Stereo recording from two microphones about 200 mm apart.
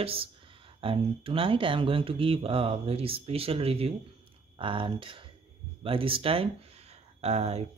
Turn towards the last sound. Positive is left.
turn(degrees=-30)  # may be behind; listen again after turning